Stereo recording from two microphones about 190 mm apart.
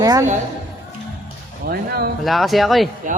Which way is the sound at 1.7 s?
55° right (ahead or behind).